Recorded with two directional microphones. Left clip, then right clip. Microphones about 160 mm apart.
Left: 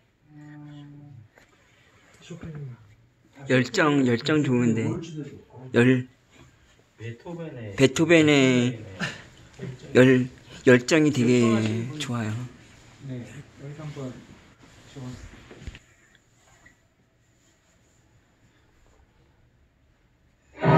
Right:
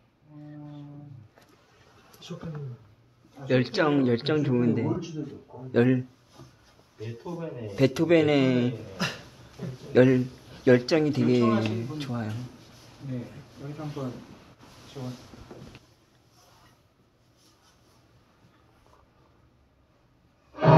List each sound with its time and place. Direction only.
3.4 s a man's voice: 40° left (ahead or behind)
7.7 s speech: 50° left (ahead or behind)
9.0 s dog: 90° right
9.9 s speech: 50° left (ahead or behind)